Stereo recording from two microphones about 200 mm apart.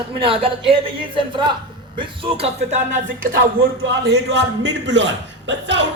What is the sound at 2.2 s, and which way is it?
Speech, 30° right (ahead or behind).